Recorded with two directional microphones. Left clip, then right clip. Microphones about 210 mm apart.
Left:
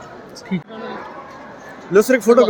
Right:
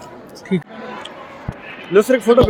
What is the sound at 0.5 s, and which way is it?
Speech, 45° right (ahead or behind).